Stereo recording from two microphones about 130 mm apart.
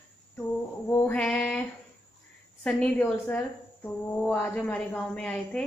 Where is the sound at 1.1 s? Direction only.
10° left (ahead or behind).